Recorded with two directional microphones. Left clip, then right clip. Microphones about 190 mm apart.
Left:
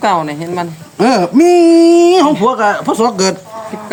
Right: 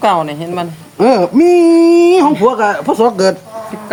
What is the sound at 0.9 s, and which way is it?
A man's voice, 45° left (ahead or behind).